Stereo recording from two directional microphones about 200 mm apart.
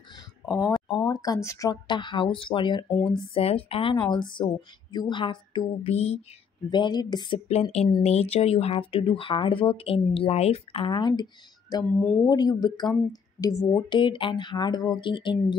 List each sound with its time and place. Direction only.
0.5 s speech: 15° left (ahead or behind)
2.9 s speech: 10° left (ahead or behind)
3.3 s speech: 30° left (ahead or behind)
6.7 s speech: 20° left (ahead or behind)
12.3 s speech: 20° left (ahead or behind)